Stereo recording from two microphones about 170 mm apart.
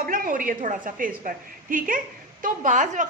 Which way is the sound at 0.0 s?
55° right (ahead or behind).